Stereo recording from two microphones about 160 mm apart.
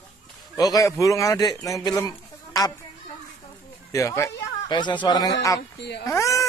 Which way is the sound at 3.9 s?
20° left (ahead or behind).